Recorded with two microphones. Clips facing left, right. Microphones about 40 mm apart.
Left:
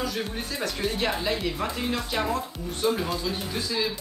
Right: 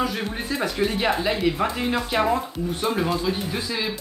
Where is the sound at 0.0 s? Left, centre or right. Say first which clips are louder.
Right 4 dB; centre.